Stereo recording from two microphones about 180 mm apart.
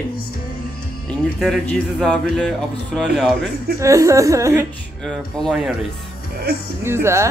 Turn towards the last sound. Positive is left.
turn(degrees=-15)  # may be behind; listen again after turning